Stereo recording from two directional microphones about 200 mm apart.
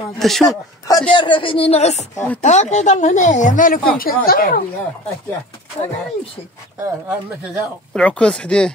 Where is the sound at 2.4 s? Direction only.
35° left (ahead or behind).